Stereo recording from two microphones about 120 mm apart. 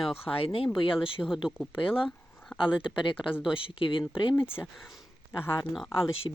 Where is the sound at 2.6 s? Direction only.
45° left (ahead or behind).